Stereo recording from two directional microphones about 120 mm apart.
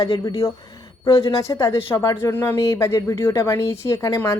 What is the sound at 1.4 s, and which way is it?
A woman's voice, 25° left (ahead or behind).